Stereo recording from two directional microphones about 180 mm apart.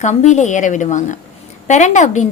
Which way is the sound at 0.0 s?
40° left (ahead or behind).